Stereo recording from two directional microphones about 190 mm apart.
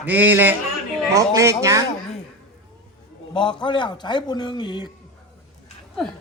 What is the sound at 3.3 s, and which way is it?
A man's voice, 25° left (ahead or behind).